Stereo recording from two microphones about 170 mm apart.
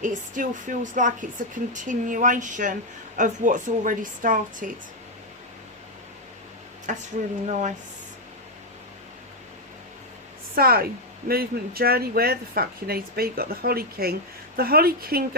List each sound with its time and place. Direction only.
0.0 s speech: 50° right (ahead or behind)
6.9 s speech: 45° right (ahead or behind)
10.5 s speech: 60° right (ahead or behind)